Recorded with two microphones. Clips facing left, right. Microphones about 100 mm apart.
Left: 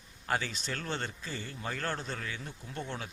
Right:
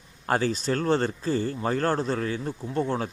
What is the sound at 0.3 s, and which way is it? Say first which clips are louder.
Speech: right 10 dB; 40° right (ahead or behind).